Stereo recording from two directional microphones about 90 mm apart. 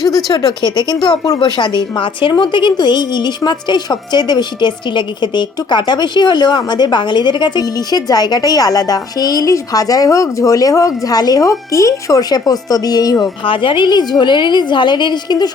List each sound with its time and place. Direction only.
0.3 s a woman's voice: 45° left (ahead or behind)
1.4 s a woman's voice: 60° left (ahead or behind); by 13.3 s 40° left (ahead or behind)
13.4 s a woman's voice: 70° left (ahead or behind); by 15.4 s 55° left (ahead or behind)